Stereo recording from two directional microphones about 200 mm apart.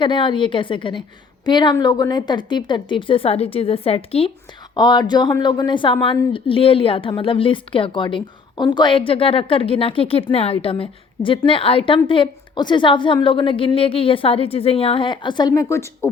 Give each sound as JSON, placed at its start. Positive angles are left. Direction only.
{"t": 0.0, "sound": "a woman's voice", "side_deg": 25}